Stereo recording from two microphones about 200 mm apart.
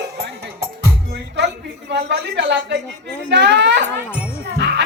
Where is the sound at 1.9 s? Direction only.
60° right (ahead or behind).